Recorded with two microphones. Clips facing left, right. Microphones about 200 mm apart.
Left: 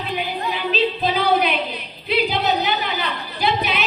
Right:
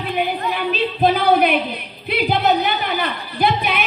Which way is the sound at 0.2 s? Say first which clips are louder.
Right 7 dB; 55° right (ahead or behind).